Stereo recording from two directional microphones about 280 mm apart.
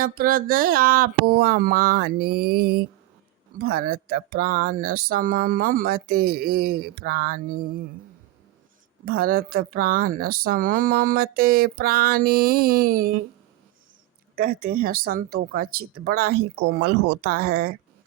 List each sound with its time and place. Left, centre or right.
0.0 s speech: right
9.0 s speech: right
14.3 s speech: right